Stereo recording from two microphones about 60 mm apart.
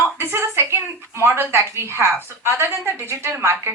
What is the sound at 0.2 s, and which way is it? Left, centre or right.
A woman's voice, right.